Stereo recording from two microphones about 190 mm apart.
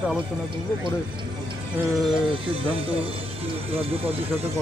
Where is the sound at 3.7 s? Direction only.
30° right (ahead or behind).